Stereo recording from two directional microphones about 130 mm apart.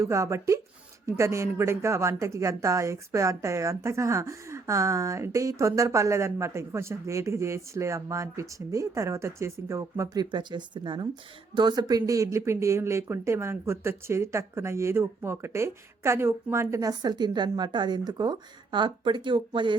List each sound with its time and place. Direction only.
0.0 s a woman's voice: 20° right (ahead or behind)
10.3 s a woman's voice: 35° right (ahead or behind)